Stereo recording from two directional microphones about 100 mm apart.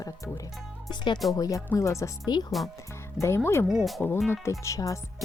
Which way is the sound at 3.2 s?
25° left (ahead or behind).